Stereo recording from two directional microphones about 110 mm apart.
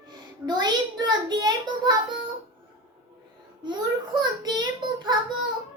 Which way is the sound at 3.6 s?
40° right (ahead or behind).